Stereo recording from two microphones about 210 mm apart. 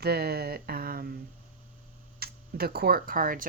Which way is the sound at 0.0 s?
50° right (ahead or behind).